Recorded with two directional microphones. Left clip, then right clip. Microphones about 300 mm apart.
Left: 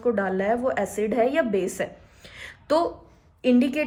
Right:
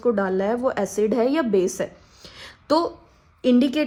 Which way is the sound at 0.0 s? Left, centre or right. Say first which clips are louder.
Right 2 dB; centre.